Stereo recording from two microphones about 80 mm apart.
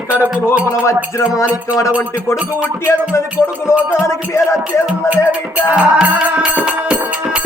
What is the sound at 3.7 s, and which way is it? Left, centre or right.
Music, left.